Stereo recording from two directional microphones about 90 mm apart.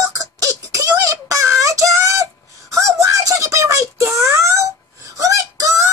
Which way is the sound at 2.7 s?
40° right (ahead or behind).